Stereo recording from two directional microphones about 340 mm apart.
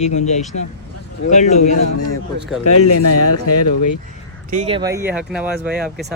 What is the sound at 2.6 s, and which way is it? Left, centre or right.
Speech, left.